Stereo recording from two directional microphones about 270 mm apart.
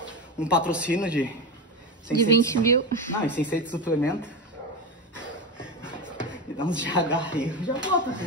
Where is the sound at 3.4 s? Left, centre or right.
Centre.